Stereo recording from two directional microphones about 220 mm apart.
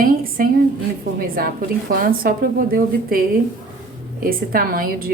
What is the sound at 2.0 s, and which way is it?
A woman's voice, 40° right (ahead or behind).